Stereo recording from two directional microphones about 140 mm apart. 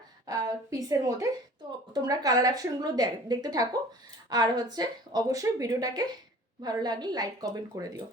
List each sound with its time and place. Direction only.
0.3 s a woman's voice: 25° right (ahead or behind)